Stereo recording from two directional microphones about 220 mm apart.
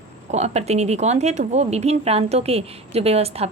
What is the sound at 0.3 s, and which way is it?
A woman's voice, 30° right (ahead or behind).